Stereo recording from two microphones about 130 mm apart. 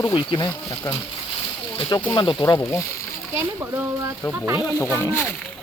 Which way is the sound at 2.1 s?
35° left (ahead or behind).